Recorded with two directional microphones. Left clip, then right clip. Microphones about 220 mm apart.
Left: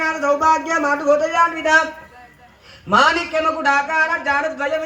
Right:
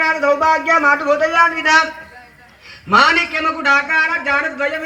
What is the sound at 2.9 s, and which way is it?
A man's voice, 25° left (ahead or behind).